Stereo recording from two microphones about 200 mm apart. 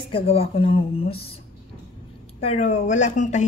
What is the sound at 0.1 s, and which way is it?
Speech, 30° left (ahead or behind).